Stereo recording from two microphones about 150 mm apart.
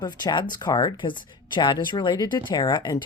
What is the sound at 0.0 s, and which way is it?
Speech, 30° left (ahead or behind).